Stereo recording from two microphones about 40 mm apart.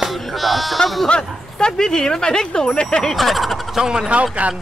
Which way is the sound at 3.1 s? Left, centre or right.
Centre.